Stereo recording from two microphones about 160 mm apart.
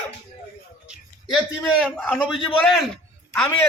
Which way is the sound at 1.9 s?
Centre (ahead or behind).